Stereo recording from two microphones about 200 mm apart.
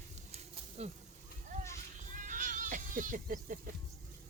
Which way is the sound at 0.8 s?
35° right (ahead or behind).